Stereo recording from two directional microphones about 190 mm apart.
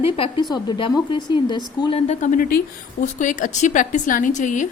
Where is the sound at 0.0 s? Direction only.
30° left (ahead or behind).